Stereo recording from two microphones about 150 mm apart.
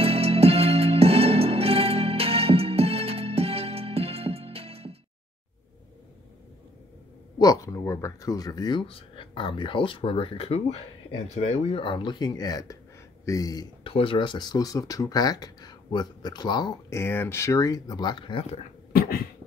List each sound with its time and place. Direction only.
0.0 s music: 40° right (ahead or behind)
7.3 s speech: 25° left (ahead or behind)
17.0 s speech: 15° left (ahead or behind); by 18.6 s 35° left (ahead or behind)